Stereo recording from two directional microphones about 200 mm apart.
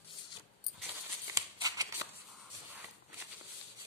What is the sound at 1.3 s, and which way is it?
Shuffling cards, 20° right (ahead or behind).